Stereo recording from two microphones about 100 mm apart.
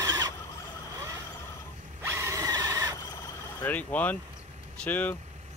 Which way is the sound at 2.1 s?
25° right (ahead or behind).